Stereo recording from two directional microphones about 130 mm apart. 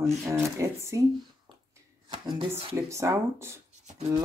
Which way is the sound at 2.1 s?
40° right (ahead or behind).